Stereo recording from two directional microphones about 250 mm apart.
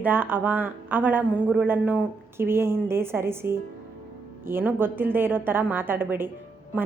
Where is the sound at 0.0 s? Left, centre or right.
Centre.